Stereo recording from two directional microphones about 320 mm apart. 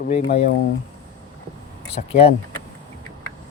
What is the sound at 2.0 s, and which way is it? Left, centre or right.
Speech, centre.